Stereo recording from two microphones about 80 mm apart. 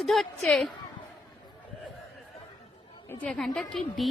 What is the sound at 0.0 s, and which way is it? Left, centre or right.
Speech, centre.